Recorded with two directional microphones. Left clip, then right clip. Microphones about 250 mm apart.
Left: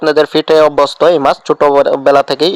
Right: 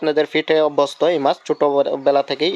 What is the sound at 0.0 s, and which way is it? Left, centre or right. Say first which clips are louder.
Speech: left 8 dB; left.